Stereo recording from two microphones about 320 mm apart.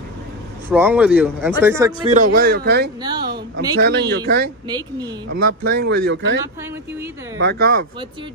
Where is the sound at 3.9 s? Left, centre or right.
Right.